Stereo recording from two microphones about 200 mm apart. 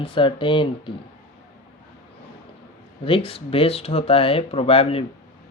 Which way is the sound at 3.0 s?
25° left (ahead or behind).